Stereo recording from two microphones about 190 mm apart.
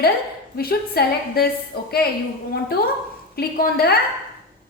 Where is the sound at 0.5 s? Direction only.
55° left (ahead or behind).